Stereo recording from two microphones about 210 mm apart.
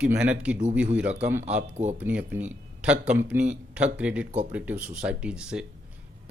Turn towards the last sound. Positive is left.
turn(degrees=-5)  # may be behind; listen again after turning